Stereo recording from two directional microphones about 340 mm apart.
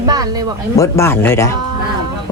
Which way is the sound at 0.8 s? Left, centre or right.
Centre.